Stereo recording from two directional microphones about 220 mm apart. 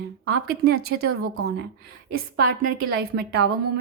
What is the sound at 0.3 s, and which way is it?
A woman's voice, 45° right (ahead or behind).